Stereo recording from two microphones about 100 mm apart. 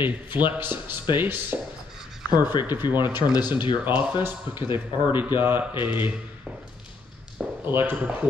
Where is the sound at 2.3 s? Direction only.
45° left (ahead or behind).